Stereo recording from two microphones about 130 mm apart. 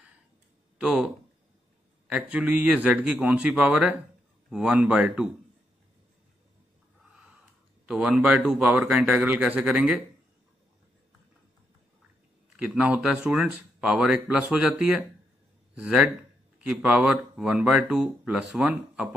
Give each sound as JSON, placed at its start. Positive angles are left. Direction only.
{"t": 0.7, "sound": "speech", "side_deg": -5}
{"t": 7.8, "sound": "speech", "side_deg": -5}
{"t": 12.5, "sound": "speech", "side_deg": -10}